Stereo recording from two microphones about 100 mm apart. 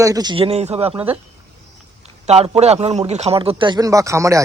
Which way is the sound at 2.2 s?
90° right.